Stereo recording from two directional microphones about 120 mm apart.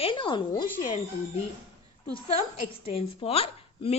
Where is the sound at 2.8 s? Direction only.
50° left (ahead or behind).